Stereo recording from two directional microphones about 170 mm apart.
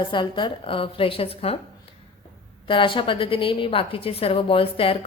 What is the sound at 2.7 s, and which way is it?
A woman's voice, 30° left (ahead or behind).